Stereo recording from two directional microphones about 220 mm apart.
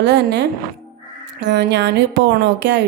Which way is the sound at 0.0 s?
55° right (ahead or behind).